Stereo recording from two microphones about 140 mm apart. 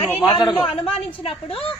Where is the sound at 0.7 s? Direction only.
45° left (ahead or behind).